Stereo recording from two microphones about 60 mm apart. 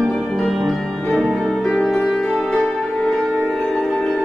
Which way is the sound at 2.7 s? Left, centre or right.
Centre.